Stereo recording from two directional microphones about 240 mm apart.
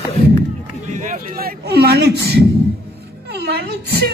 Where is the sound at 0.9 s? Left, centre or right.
Right.